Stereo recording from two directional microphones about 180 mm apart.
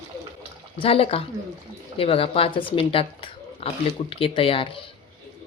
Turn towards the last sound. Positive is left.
turn(degrees=30)  # may be behind; listen again after turning